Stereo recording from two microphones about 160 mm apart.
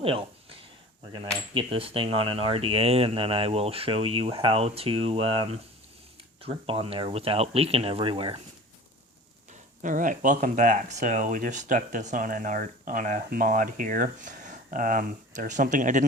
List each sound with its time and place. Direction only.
0.0 s a sound: 35° right (ahead or behind)
1.0 s cutlery: 25° right (ahead or behind)
9.5 s speech: 55° right (ahead or behind)